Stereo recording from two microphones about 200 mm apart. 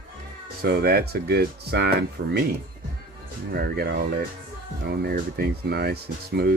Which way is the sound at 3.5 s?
50° right (ahead or behind).